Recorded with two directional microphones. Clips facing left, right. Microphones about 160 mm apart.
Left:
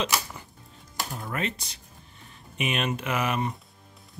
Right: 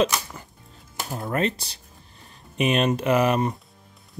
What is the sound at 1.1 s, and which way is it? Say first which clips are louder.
Speech: right 8 dB; 40° right (ahead or behind).